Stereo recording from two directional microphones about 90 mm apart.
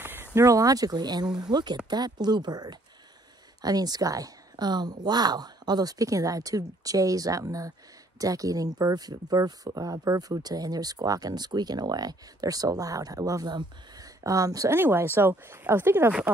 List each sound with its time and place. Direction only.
0.0 s a sound: 20° right (ahead or behind)
0.3 s speech: 35° right (ahead or behind)
14.7 s speech: 25° right (ahead or behind)